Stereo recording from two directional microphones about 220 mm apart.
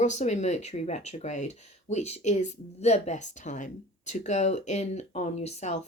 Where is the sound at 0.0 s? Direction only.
30° left (ahead or behind).